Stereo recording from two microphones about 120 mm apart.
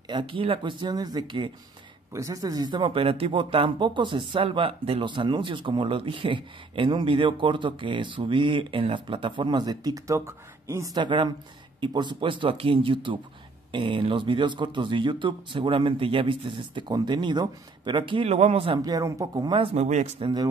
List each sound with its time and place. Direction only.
0.1 s speech: 45° right (ahead or behind)
2.1 s speech: 25° right (ahead or behind)
11.0 s speech: 40° right (ahead or behind)
18.8 s speech: 30° right (ahead or behind)
19.6 s speech: 60° right (ahead or behind)
20.2 s speech: 40° right (ahead or behind)